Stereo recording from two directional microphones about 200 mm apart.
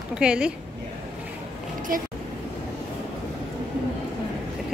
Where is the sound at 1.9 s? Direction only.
45° right (ahead or behind).